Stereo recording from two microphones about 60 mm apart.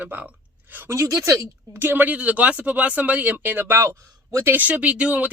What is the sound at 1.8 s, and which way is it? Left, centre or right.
Speech, right.